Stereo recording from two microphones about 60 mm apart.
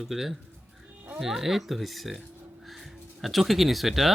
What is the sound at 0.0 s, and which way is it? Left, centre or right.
A child's voice, centre.